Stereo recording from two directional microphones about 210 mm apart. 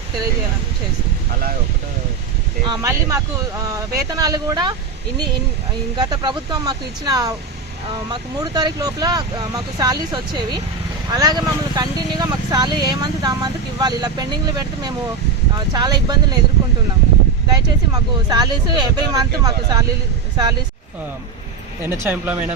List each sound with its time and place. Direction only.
2.6 s speech: 15° right (ahead or behind)
6.0 s speech: 20° right (ahead or behind)
17.5 s speech: 20° right (ahead or behind)
21.8 s speech: 10° right (ahead or behind)